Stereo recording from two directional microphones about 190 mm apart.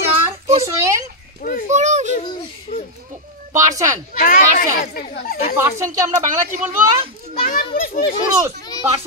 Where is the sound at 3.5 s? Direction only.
15° right (ahead or behind).